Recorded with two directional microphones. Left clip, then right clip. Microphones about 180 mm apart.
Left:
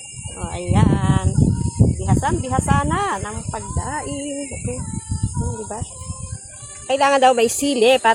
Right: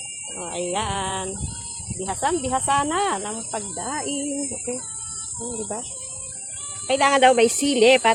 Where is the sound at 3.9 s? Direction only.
15° right (ahead or behind).